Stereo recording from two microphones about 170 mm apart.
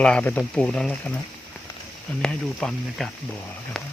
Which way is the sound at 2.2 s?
5° left (ahead or behind).